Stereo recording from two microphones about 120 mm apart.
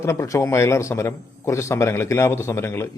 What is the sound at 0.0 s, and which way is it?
A man's voice, 25° left (ahead or behind).